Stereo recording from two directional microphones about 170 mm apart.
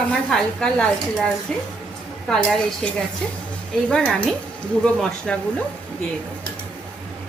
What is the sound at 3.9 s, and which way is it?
Speech, 5° left (ahead or behind).